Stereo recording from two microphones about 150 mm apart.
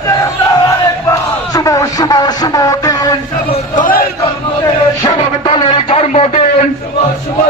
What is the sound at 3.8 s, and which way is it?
Chant, 75° left (ahead or behind).